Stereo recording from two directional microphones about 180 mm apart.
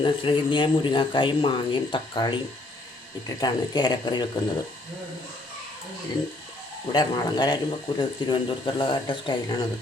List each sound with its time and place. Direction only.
0.0 s speech: 30° left (ahead or behind)
6.9 s speech: 25° left (ahead or behind)